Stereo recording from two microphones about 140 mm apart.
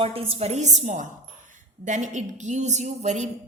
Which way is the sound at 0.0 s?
40° right (ahead or behind).